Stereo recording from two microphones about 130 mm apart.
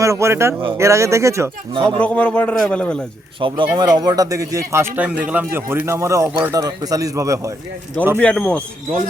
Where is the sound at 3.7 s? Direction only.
30° right (ahead or behind).